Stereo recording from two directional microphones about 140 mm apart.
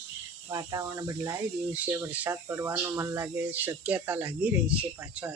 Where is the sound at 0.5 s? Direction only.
25° right (ahead or behind).